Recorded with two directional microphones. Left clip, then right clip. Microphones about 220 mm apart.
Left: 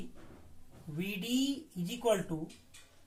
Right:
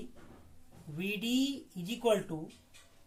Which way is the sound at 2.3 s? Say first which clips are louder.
Left 1 dB; 40° right (ahead or behind).